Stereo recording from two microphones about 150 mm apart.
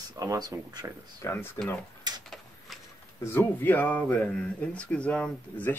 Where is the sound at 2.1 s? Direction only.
25° right (ahead or behind).